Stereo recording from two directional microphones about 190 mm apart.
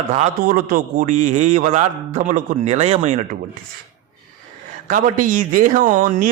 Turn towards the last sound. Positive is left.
turn(degrees=-45)  # may be behind; listen again after turning